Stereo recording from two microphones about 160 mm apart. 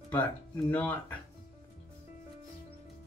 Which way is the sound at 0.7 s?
10° left (ahead or behind).